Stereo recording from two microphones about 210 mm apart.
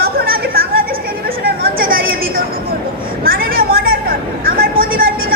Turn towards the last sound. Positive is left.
turn(degrees=-45)  # may be behind; listen again after turning